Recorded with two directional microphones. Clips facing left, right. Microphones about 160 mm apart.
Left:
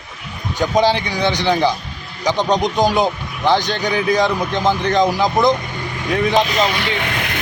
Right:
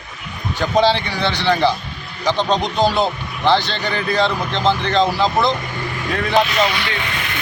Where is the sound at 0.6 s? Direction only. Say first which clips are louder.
Even; 15° left (ahead or behind).